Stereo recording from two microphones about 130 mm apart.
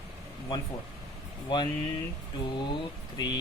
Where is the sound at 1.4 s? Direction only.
35° left (ahead or behind).